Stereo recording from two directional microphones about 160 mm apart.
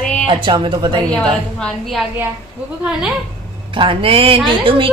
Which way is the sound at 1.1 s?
5° left (ahead or behind).